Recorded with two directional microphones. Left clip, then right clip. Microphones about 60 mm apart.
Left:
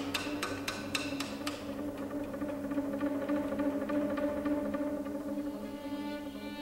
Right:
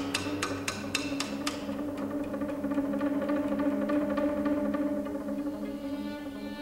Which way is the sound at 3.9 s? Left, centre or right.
Centre.